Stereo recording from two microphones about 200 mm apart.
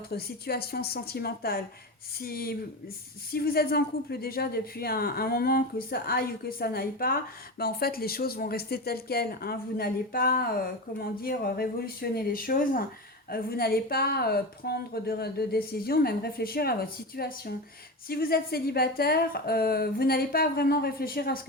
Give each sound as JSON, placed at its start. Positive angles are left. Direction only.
{"t": 0.1, "sound": "a woman's voice", "side_deg": 50}